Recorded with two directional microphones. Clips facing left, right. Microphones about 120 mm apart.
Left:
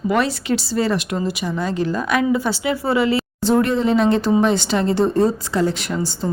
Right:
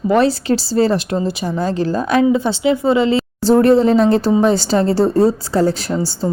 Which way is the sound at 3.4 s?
35° right (ahead or behind).